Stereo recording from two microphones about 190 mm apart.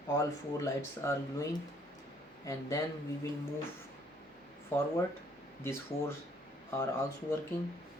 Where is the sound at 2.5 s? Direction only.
15° left (ahead or behind).